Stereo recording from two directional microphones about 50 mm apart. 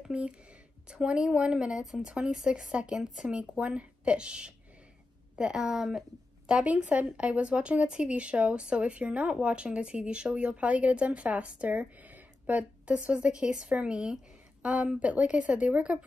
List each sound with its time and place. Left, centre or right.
0.1 s speech: right
1.8 s speech: centre
2.0 s a woman's voice: centre
6.6 s speech: right